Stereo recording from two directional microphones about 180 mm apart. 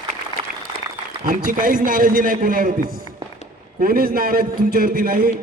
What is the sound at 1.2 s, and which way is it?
A man's voice, 50° right (ahead or behind).